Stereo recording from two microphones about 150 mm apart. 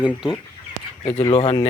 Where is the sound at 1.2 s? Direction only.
35° left (ahead or behind).